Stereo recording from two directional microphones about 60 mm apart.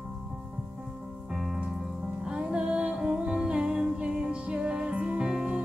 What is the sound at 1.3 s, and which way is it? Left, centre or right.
Music, centre.